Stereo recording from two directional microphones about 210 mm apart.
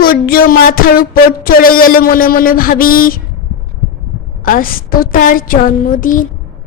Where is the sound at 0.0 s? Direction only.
45° left (ahead or behind).